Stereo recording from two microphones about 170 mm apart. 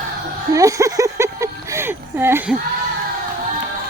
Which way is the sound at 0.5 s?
20° right (ahead or behind).